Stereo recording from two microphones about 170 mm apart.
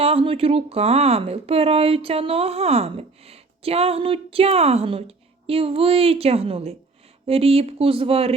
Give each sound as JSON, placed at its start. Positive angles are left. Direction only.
{"t": 0.0, "sound": "speech", "side_deg": -35}